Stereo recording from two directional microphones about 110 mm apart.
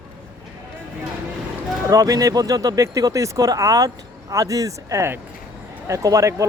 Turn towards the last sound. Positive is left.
turn(degrees=-30)  # may be behind; listen again after turning